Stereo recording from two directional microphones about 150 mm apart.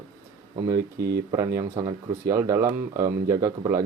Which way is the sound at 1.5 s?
20° right (ahead or behind).